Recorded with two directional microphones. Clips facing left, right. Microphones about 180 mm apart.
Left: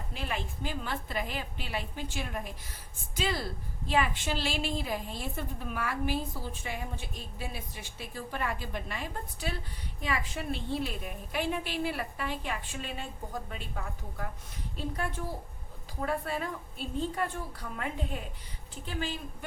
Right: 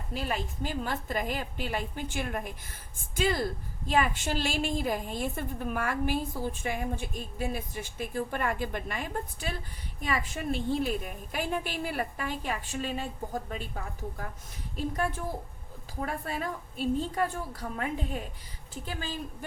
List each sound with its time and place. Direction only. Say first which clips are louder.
0.1 s a woman's voice: right 4 dB; 40° right (ahead or behind)
16.2 s a woman's voice: right 1 dB; 45° right (ahead or behind)
18.9 s a woman's voice: left 1 dB; 40° right (ahead or behind)